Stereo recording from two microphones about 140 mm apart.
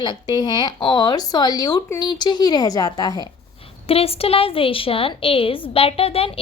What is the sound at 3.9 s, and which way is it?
A woman's voice, 45° left (ahead or behind).